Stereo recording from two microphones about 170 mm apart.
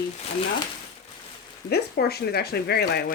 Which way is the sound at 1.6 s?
70° left (ahead or behind).